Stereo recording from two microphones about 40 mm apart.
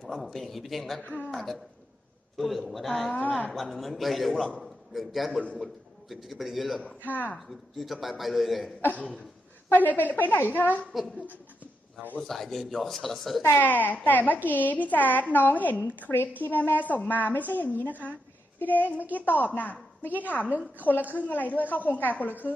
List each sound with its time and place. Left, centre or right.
0.0 s a man's voice: centre
1.0 s a woman's voice: left
1.3 s a man's voice: centre
3.3 s a woman's voice: left
3.6 s a man's voice: centre
7.0 s a woman's voice: left
7.3 s a man's voice: centre
9.7 s a woman's voice: left
11.1 s a sound: right
12.2 s a man's voice: centre
13.6 s a woman's voice: left